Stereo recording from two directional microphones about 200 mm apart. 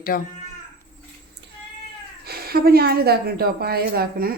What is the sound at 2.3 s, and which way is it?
A woman's voice, 50° right (ahead or behind).